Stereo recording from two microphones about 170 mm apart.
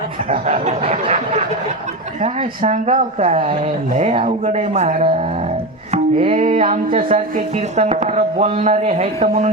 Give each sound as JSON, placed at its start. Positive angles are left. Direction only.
{"t": 0.3, "sound": "speech", "side_deg": -40}
{"t": 5.9, "sound": "music", "side_deg": -35}
{"t": 6.6, "sound": "speech", "side_deg": -35}